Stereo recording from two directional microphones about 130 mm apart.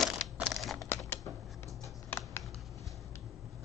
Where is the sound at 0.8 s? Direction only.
20° left (ahead or behind).